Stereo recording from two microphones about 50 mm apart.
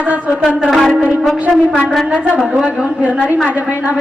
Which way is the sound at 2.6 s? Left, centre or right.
Centre.